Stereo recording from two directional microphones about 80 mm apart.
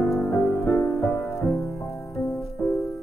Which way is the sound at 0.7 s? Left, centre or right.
Left.